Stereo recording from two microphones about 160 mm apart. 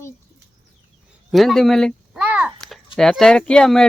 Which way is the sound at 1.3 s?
Centre (ahead or behind).